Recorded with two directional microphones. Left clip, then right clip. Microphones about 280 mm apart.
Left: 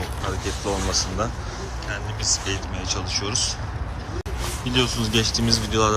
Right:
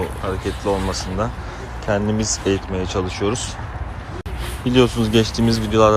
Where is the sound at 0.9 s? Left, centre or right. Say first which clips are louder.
Right 1 dB; centre.